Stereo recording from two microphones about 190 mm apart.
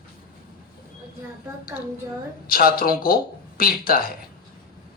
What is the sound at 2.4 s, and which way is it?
Speech, 50° left (ahead or behind).